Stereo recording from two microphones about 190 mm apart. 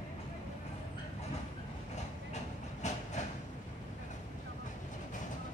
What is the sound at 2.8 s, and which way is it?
Train, 40° left (ahead or behind).